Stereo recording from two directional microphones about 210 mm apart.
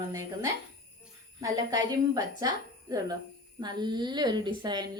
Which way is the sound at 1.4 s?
15° right (ahead or behind).